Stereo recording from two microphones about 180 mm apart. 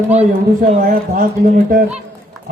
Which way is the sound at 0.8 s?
50° right (ahead or behind).